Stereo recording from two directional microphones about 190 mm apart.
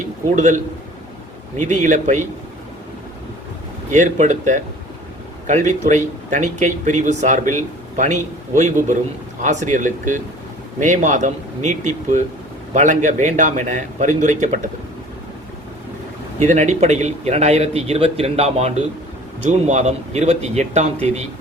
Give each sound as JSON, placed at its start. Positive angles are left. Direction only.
{"t": 0.3, "sound": "speech", "side_deg": -40}
{"t": 3.9, "sound": "speech", "side_deg": -40}
{"t": 16.4, "sound": "speech", "side_deg": -40}